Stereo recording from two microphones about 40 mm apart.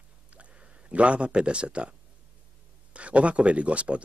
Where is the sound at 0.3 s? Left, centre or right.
Right.